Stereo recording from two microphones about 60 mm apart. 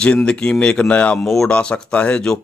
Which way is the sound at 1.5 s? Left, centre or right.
Centre.